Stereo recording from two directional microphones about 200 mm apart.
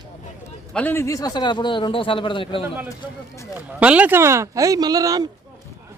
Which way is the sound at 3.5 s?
5° right (ahead or behind).